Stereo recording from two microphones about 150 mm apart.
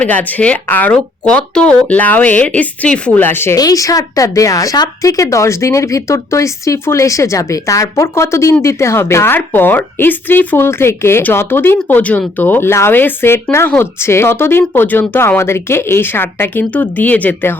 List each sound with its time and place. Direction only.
0.0 s a woman's voice: 10° left (ahead or behind)